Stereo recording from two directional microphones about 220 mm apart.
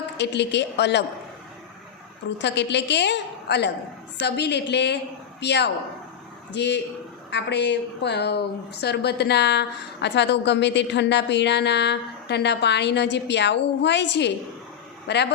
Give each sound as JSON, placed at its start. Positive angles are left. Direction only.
{"t": 0.2, "sound": "a woman's voice", "side_deg": 50}
{"t": 2.4, "sound": "a woman's voice", "side_deg": 50}